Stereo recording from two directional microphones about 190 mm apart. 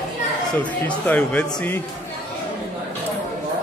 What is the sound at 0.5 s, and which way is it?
Speech, 10° left (ahead or behind).